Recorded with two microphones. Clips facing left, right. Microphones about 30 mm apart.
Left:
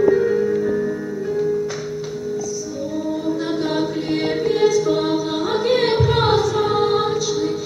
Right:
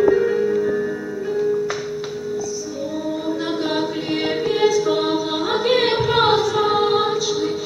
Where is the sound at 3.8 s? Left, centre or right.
Centre.